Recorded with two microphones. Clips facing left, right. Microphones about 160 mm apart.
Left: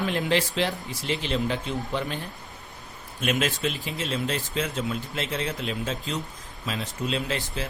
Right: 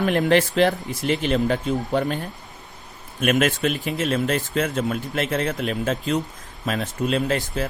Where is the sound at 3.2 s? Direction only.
55° right (ahead or behind).